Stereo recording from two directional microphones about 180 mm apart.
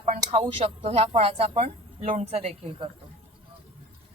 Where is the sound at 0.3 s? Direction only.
30° right (ahead or behind).